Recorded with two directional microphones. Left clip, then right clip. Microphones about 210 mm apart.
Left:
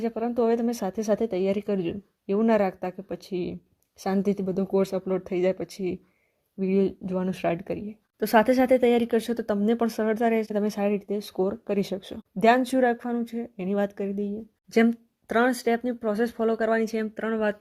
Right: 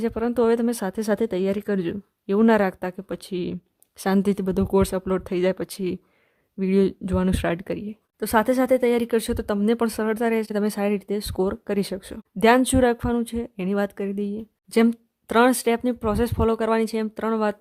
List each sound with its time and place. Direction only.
0.0 s speech: 20° right (ahead or behind)